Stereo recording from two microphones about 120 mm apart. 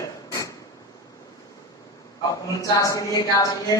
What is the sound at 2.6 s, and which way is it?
A woman's voice, 30° left (ahead or behind).